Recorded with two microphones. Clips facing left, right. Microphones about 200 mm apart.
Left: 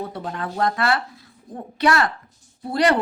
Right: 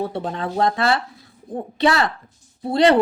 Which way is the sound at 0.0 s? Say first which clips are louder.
Right 4 dB; 30° right (ahead or behind).